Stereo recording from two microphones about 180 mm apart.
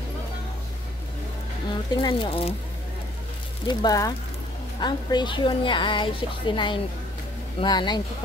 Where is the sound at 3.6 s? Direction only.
25° left (ahead or behind).